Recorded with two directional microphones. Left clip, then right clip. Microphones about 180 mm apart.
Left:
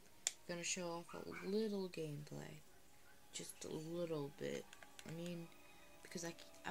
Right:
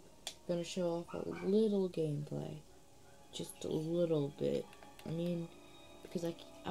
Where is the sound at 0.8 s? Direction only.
45° left (ahead or behind).